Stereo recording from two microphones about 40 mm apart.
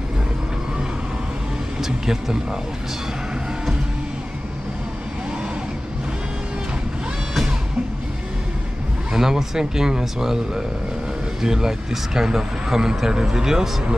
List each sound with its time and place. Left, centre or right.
1.8 s speech: centre
9.1 s speech: centre